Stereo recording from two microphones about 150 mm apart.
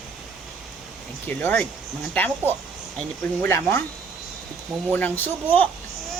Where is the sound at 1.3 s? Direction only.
15° left (ahead or behind).